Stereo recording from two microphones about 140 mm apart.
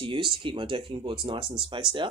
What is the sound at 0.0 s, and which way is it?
Speech, 35° right (ahead or behind).